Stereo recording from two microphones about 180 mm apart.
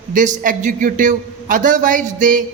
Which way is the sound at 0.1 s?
45° right (ahead or behind).